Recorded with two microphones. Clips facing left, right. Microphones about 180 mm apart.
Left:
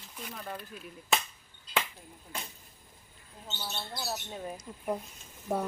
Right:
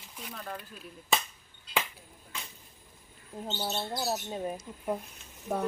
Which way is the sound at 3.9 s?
25° right (ahead or behind).